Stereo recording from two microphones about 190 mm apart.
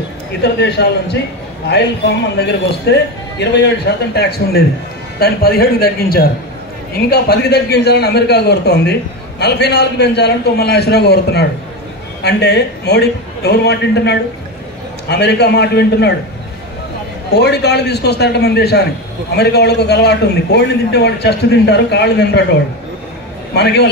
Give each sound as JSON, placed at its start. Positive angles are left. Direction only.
{"t": 0.4, "sound": "a man's voice", "side_deg": 60}
{"t": 17.3, "sound": "a man's voice", "side_deg": 60}
{"t": 23.5, "sound": "a man's voice", "side_deg": 60}